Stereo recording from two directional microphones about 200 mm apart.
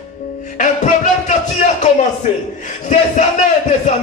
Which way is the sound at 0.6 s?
40° left (ahead or behind).